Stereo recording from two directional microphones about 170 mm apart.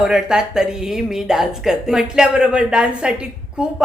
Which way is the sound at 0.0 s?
5° right (ahead or behind).